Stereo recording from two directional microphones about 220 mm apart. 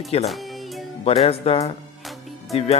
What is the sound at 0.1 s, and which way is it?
Speech, 30° left (ahead or behind).